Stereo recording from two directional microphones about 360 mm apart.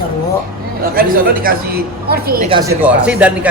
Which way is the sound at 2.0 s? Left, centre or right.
Right.